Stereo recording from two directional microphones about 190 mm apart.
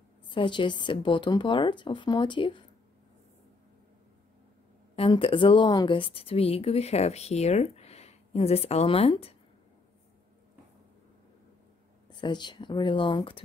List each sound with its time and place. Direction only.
0.3 s a woman's voice: 25° left (ahead or behind)
4.9 s a woman's voice: 30° left (ahead or behind)
12.2 s a woman's voice: 25° left (ahead or behind)